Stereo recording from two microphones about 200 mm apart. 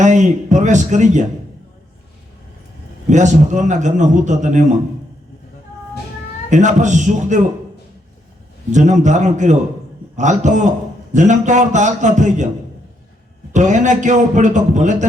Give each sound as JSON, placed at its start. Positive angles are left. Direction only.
{"t": 0.0, "sound": "a man's voice", "side_deg": -35}
{"t": 3.1, "sound": "a man's voice", "side_deg": -35}
{"t": 6.5, "sound": "a man's voice", "side_deg": -35}
{"t": 8.7, "sound": "a man's voice", "side_deg": -35}
{"t": 13.5, "sound": "a man's voice", "side_deg": -35}